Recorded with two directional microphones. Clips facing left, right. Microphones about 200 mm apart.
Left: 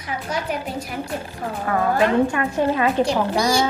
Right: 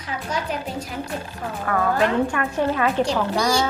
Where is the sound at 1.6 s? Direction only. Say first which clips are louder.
Left 2 dB; 20° left (ahead or behind).